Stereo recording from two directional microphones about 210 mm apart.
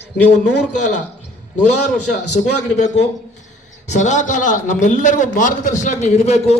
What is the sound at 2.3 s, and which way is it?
A man's voice, 35° left (ahead or behind).